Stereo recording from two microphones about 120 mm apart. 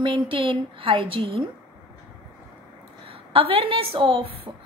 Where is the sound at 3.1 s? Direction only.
50° right (ahead or behind).